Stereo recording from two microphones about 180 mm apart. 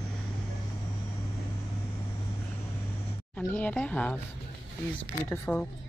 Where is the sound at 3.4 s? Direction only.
10° left (ahead or behind).